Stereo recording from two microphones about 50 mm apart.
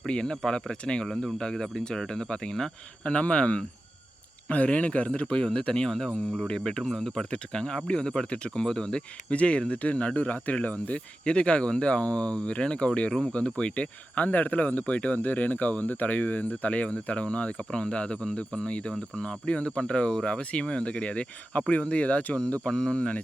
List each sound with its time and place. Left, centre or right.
0.0 s speech: centre
22.6 s speech: centre